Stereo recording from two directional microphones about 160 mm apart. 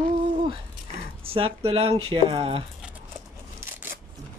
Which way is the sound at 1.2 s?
35° right (ahead or behind).